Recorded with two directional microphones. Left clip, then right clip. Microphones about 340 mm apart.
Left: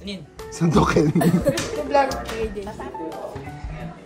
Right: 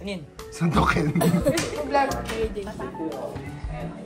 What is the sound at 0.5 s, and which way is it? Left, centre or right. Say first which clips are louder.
Speech: left 4 dB; centre.